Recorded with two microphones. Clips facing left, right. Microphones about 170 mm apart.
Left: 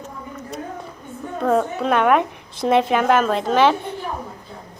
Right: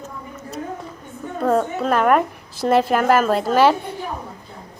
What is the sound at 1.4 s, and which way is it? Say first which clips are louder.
A woman's voice: even; centre (ahead or behind).